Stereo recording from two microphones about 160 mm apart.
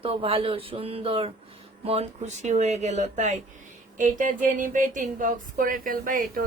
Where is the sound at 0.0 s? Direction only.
35° right (ahead or behind).